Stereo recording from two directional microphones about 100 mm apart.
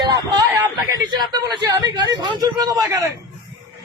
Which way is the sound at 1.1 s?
45° right (ahead or behind).